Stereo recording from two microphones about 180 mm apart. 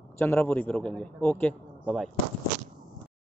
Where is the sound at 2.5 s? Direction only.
40° right (ahead or behind).